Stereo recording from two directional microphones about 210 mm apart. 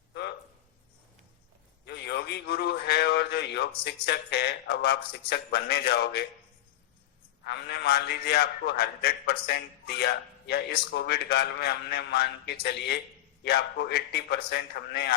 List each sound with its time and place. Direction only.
0.1 s a sound: 50° left (ahead or behind)
1.8 s a man's voice: 50° left (ahead or behind)
7.4 s a man's voice: 50° left (ahead or behind)